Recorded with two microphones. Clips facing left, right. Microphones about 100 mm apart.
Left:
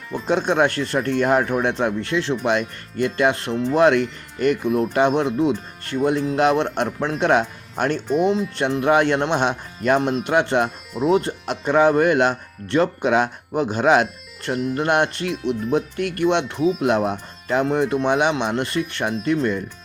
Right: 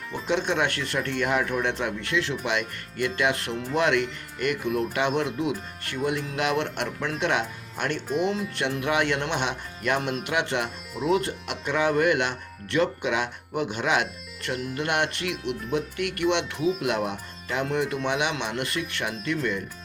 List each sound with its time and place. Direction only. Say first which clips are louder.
0.3 s speech: left 6 dB; 40° left (ahead or behind)
3.5 s speech: left 8 dB; centre (ahead or behind)
3.8 s speech: left 7 dB; 35° left (ahead or behind)
8.0 s speech: left 6 dB; centre (ahead or behind)
8.3 s speech: left 7 dB; 30° left (ahead or behind)
16.6 s speech: left 5 dB; centre (ahead or behind)
16.8 s speech: left 7 dB; 35° left (ahead or behind)